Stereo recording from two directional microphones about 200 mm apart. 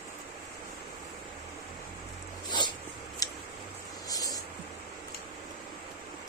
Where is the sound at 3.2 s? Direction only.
15° left (ahead or behind).